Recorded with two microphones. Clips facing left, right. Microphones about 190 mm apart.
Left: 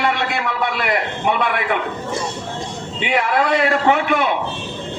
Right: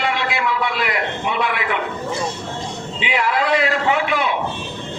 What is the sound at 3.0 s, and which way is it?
A man's voice, 50° left (ahead or behind).